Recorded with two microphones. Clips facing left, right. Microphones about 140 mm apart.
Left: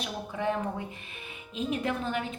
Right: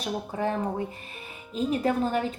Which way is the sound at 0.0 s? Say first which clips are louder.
Right 3 dB; 40° right (ahead or behind).